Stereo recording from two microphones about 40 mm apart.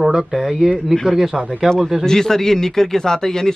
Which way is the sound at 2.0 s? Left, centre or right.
Centre.